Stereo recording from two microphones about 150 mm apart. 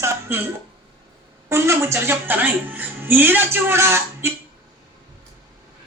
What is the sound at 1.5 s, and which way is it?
A woman's voice, 15° right (ahead or behind).